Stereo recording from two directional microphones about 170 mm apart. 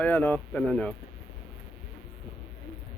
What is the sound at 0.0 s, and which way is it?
Speech, 10° left (ahead or behind).